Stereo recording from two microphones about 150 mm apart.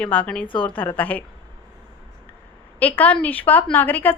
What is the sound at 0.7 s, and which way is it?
Speech, 10° left (ahead or behind).